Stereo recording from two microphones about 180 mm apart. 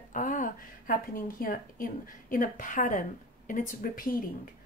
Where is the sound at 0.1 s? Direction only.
45° left (ahead or behind).